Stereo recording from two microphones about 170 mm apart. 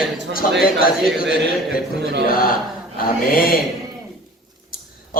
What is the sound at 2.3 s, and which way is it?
A man's voice, 55° left (ahead or behind).